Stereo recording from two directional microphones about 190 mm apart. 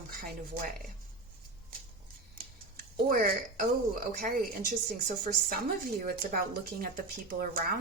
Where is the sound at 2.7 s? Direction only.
50° right (ahead or behind).